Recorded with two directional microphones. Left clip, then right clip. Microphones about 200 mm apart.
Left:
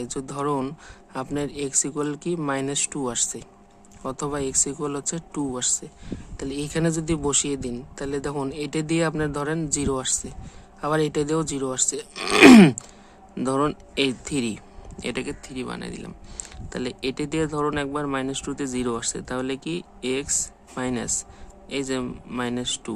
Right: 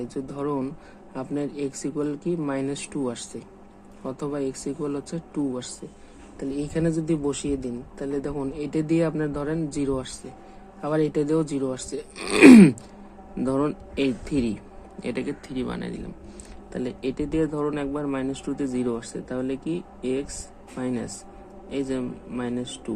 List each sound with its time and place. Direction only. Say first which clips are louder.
0.0 s a man's voice: left 2 dB; 25° left (ahead or behind)